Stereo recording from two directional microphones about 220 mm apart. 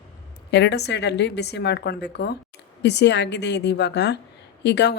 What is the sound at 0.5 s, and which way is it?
Speech, 50° left (ahead or behind).